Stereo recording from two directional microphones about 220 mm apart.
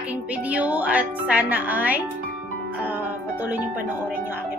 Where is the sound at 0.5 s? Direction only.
5° right (ahead or behind).